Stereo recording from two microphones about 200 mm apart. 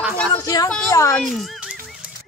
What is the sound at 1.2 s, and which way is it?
Speech, centre (ahead or behind).